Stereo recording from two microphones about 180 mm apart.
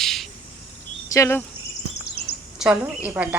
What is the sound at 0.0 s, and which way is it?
Cricket, centre (ahead or behind).